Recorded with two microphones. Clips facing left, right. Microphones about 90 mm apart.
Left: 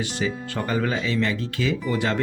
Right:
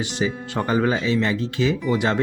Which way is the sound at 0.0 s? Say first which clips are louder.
Right 2 dB; 20° right (ahead or behind).